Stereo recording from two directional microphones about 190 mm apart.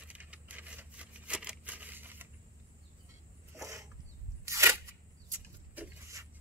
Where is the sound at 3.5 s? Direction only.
15° right (ahead or behind).